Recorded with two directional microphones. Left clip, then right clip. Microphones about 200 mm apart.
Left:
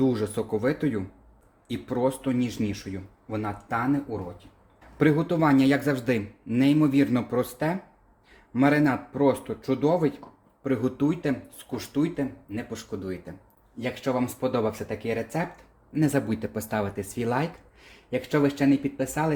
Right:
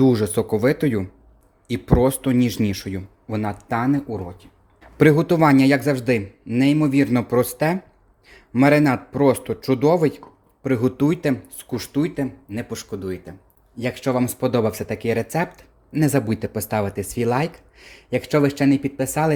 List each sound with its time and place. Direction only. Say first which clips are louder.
0.0 s speech: right 7 dB; 50° right (ahead or behind)
15.9 s speech: right 5 dB; 40° right (ahead or behind)